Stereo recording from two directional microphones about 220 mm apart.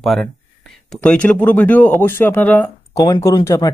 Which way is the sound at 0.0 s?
Centre (ahead or behind).